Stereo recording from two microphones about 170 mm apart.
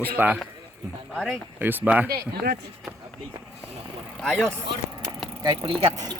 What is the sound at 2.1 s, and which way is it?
Speech, 65° right (ahead or behind).